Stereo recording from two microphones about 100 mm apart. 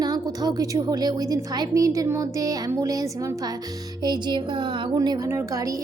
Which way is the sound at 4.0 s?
45° right (ahead or behind).